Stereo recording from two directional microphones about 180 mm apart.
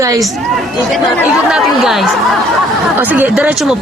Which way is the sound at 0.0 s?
20° right (ahead or behind).